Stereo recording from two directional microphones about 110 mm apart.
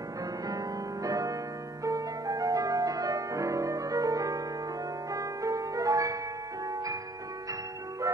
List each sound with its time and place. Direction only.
0.5 s music: 35° right (ahead or behind)